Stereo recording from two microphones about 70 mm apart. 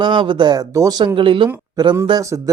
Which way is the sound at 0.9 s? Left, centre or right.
Right.